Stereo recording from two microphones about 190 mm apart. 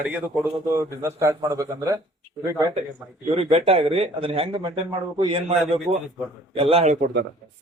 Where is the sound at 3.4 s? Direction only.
30° right (ahead or behind).